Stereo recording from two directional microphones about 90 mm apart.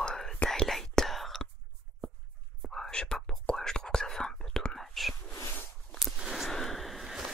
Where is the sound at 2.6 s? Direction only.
5° left (ahead or behind).